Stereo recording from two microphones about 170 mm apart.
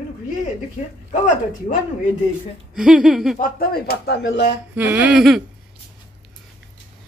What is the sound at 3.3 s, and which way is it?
Speech, 55° left (ahead or behind).